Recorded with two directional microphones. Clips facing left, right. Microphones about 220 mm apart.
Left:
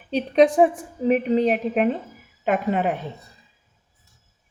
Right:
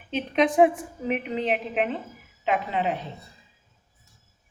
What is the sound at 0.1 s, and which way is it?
A woman's voice, 35° left (ahead or behind).